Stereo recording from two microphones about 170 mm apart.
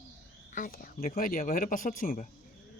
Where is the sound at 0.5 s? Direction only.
55° left (ahead or behind).